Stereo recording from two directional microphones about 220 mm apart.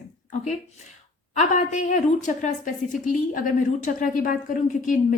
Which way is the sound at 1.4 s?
35° left (ahead or behind).